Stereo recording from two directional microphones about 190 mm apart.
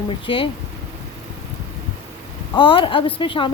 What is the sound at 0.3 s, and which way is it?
Speech, 25° left (ahead or behind).